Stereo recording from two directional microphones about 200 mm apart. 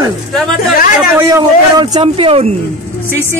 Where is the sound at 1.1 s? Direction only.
20° right (ahead or behind).